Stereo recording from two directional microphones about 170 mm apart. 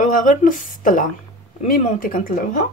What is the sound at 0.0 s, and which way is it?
Speech, 50° left (ahead or behind).